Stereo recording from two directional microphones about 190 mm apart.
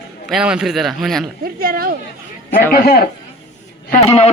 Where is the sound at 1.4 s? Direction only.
50° right (ahead or behind).